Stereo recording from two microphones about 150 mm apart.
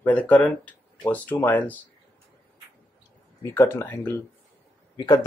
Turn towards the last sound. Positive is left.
turn(degrees=25)  # may be behind; listen again after turning